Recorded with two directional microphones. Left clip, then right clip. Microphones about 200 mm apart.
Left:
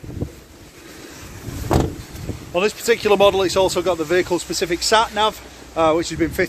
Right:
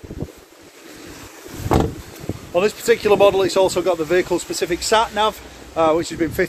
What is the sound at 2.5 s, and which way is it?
Speech, 10° left (ahead or behind).